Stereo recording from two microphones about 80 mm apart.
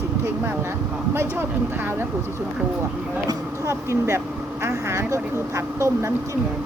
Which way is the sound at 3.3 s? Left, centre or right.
Right.